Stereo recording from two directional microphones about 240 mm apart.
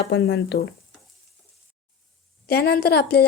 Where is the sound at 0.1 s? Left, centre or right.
Left.